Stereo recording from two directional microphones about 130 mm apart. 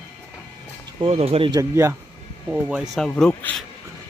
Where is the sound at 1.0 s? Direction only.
55° right (ahead or behind).